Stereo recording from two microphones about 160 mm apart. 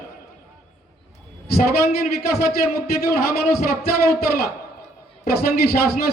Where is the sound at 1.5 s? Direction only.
75° left (ahead or behind).